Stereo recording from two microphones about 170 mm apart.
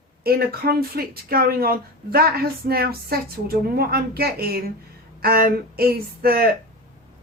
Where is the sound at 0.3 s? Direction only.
65° right (ahead or behind).